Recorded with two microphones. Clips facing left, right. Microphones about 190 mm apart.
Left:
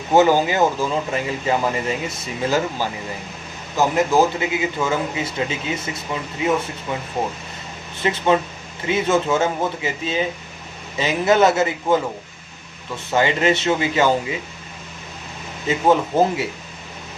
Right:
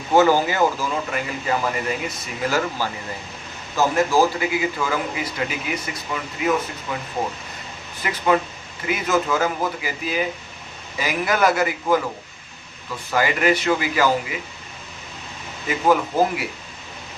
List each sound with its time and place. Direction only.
0.1 s speech: 20° left (ahead or behind)
13.1 s speech: 25° left (ahead or behind)
15.6 s speech: 25° left (ahead or behind)